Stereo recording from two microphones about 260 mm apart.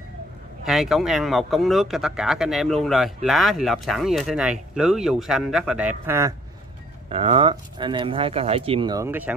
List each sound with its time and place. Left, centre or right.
0.7 s speech: centre
7.1 s speech: right